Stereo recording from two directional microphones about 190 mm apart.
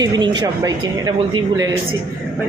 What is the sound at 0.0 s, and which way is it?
A man's voice, 20° right (ahead or behind).